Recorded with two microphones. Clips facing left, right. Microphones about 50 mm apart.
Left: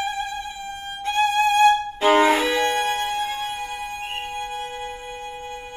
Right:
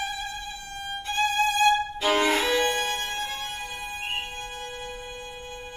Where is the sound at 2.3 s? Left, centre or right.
Centre.